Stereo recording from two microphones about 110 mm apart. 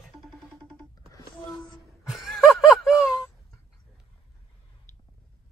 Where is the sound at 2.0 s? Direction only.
Centre (ahead or behind).